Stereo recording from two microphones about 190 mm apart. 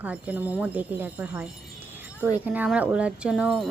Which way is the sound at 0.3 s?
10° right (ahead or behind).